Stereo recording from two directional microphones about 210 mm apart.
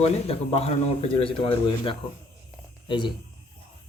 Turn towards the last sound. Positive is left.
turn(degrees=20)  # may be behind; listen again after turning